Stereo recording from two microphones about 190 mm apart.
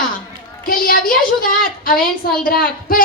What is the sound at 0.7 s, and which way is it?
A woman's voice, 50° left (ahead or behind).